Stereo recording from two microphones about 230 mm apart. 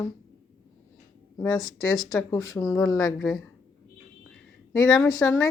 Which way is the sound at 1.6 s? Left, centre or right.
Left.